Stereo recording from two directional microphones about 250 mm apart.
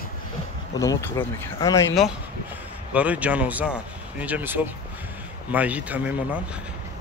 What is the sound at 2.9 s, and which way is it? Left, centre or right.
Speech, centre.